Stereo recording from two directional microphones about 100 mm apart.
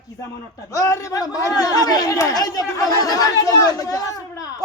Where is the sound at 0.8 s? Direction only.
35° left (ahead or behind).